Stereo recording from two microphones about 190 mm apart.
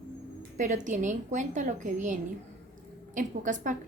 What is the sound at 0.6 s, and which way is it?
A woman's voice, 40° right (ahead or behind).